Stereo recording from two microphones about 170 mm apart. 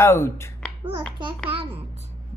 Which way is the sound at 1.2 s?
30° right (ahead or behind).